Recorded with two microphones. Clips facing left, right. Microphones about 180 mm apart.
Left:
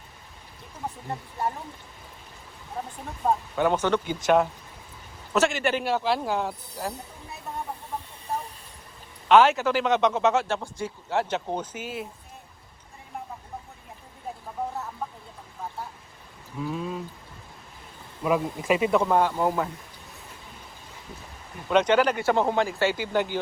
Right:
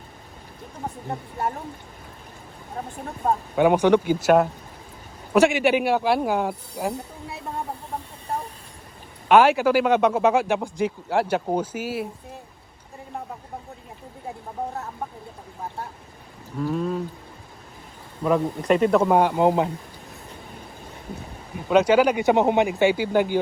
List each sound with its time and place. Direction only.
3.5 s speech: 10° right (ahead or behind)
9.3 s speech: 10° right (ahead or behind)
16.6 s speech: centre (ahead or behind)
18.2 s speech: 5° left (ahead or behind)
19.0 s speech: 15° right (ahead or behind)
21.7 s speech: 10° right (ahead or behind)